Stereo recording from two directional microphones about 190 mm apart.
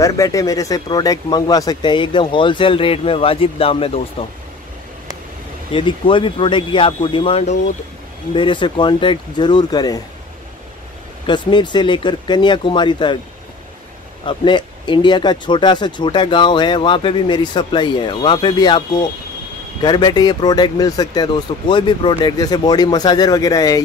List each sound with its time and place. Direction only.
0.0 s speech: 20° left (ahead or behind)
5.7 s speech: 25° left (ahead or behind)
11.2 s speech: 25° left (ahead or behind)
14.2 s speech: 25° left (ahead or behind)